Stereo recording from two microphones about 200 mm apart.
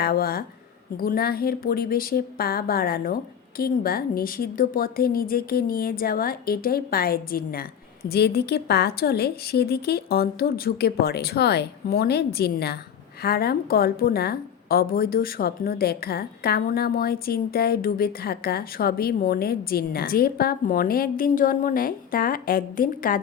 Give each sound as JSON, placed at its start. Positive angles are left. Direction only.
{"t": 0.0, "sound": "a woman's voice", "side_deg": 50}